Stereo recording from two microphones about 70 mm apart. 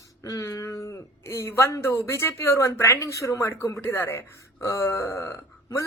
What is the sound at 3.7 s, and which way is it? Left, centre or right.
A woman's voice, left.